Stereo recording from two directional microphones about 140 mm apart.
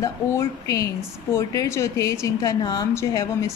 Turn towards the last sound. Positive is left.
turn(degrees=25)  # may be behind; listen again after turning